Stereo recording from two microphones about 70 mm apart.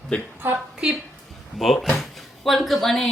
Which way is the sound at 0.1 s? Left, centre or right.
Centre.